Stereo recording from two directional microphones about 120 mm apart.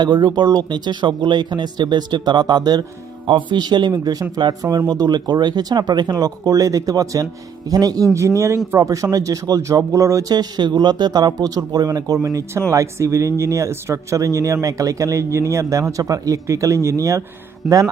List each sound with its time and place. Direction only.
0.0 s speech: 35° right (ahead or behind)
17.6 s speech: 5° right (ahead or behind)